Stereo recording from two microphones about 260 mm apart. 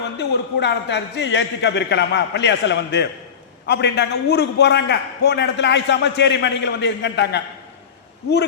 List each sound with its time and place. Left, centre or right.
0.2 s a man's voice: left